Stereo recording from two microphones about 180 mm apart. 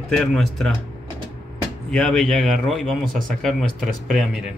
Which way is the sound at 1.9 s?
5° left (ahead or behind).